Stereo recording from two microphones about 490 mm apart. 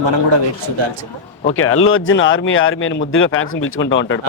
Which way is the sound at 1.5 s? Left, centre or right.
Left.